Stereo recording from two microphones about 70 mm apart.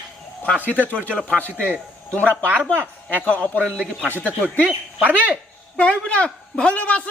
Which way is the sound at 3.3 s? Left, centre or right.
Centre.